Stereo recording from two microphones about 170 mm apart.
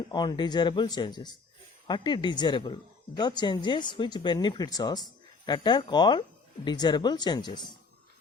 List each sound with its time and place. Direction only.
0.1 s speech: 25° left (ahead or behind)